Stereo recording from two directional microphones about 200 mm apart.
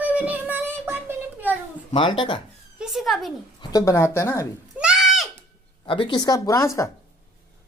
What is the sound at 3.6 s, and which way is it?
Speech, 20° left (ahead or behind).